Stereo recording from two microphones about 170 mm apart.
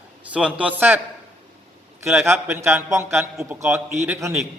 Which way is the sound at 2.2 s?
15° right (ahead or behind).